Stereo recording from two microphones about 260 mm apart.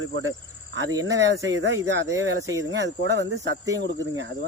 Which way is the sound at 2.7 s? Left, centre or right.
Right.